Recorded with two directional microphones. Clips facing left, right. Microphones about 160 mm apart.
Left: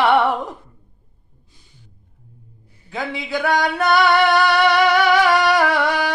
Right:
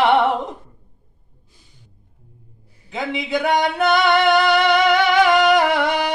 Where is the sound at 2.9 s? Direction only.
20° right (ahead or behind).